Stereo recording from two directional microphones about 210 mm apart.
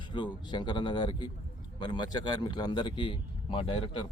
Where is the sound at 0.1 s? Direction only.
20° left (ahead or behind).